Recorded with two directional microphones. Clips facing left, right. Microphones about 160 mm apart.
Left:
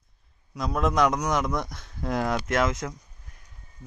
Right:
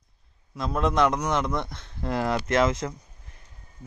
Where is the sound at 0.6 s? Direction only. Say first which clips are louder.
Even; centre (ahead or behind).